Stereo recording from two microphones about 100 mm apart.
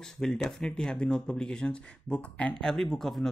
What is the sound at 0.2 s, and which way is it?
Speech, 5° left (ahead or behind).